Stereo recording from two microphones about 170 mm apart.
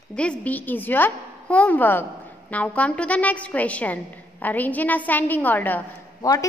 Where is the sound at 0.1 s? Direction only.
5° left (ahead or behind).